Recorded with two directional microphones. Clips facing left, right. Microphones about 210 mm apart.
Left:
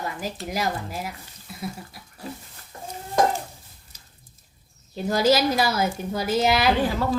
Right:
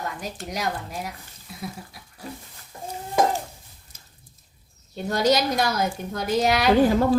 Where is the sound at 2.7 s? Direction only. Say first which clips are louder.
Right 2 dB; 5° right (ahead or behind).